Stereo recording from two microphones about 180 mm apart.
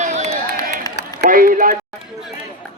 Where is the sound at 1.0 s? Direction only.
65° left (ahead or behind).